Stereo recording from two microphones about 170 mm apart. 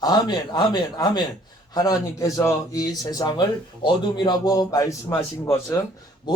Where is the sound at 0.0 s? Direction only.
25° left (ahead or behind).